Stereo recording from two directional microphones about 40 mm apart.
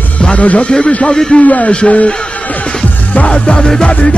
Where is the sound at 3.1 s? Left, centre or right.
Left.